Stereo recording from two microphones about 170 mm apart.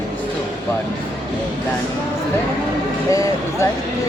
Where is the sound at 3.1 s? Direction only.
20° left (ahead or behind).